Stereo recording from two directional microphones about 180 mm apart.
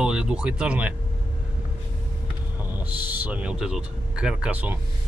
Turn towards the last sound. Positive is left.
turn(degrees=-10)  # may be behind; listen again after turning